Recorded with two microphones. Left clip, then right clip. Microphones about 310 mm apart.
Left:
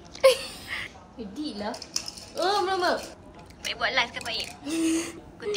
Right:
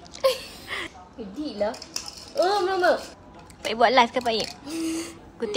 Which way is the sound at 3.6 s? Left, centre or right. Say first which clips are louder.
Right 8 dB; centre.